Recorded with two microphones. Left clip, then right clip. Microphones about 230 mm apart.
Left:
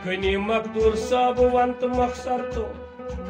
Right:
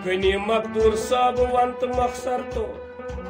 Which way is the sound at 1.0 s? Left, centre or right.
Right.